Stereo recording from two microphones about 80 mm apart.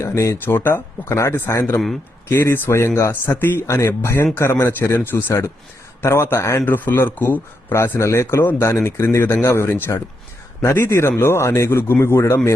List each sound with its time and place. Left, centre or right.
0.0 s speech: left
0.4 s speech: left
6.7 s speech: left